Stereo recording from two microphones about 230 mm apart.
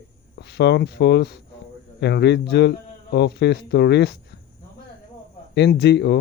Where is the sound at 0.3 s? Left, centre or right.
Left.